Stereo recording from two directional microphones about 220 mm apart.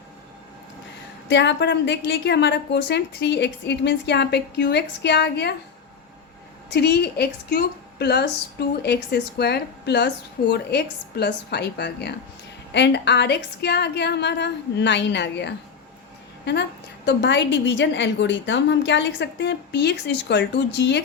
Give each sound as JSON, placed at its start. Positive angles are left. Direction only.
{"t": 1.3, "sound": "a woman's voice", "side_deg": 55}
{"t": 6.7, "sound": "a woman's voice", "side_deg": 50}
{"t": 17.1, "sound": "a woman's voice", "side_deg": 50}